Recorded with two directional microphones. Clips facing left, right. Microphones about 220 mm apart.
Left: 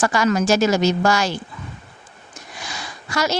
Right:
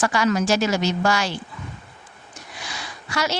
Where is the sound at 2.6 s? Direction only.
45° left (ahead or behind).